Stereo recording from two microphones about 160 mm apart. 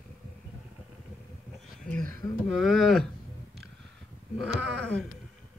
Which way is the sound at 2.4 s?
Centre (ahead or behind).